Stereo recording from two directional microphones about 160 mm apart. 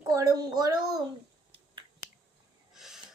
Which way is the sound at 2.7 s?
5° right (ahead or behind).